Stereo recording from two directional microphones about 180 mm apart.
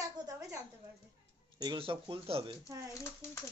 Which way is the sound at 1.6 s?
25° right (ahead or behind).